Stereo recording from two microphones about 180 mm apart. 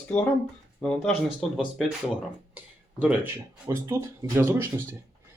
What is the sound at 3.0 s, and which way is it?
Speech, 10° right (ahead or behind).